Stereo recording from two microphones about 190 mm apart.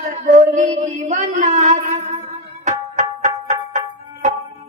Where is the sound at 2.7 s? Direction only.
40° right (ahead or behind).